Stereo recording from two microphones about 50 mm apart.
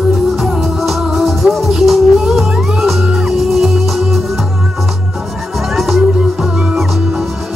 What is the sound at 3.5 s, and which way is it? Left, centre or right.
Music, centre.